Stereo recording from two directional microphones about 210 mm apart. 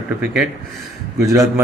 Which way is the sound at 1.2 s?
15° right (ahead or behind).